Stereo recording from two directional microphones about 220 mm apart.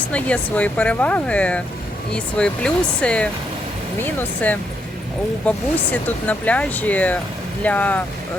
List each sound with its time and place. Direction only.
0.1 s speech: 5° left (ahead or behind)